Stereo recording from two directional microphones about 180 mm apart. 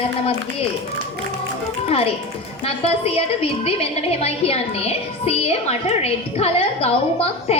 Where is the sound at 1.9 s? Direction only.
35° left (ahead or behind).